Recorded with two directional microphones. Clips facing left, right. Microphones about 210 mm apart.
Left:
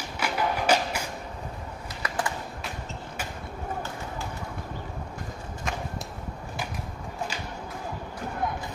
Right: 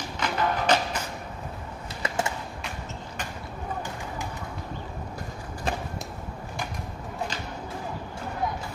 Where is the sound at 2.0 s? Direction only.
25° right (ahead or behind).